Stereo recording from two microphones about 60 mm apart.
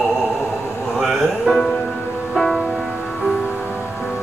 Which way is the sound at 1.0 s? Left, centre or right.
Centre.